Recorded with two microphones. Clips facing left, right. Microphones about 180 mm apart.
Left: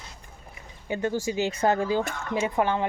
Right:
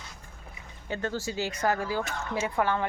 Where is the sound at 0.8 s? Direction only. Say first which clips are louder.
Left 5 dB; 15° left (ahead or behind).